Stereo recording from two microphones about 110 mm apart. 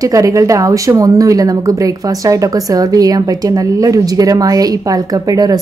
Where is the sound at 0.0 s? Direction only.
30° right (ahead or behind).